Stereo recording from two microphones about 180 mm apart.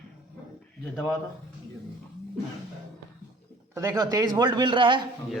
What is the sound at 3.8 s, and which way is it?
A man's voice, 20° right (ahead or behind).